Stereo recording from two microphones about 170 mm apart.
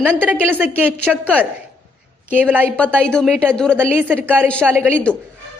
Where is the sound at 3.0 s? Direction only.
5° left (ahead or behind).